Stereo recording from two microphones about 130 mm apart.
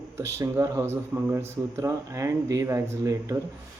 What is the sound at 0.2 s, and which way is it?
Speech, 20° right (ahead or behind).